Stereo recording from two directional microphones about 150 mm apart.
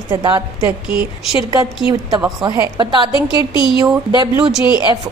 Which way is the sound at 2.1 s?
25° right (ahead or behind).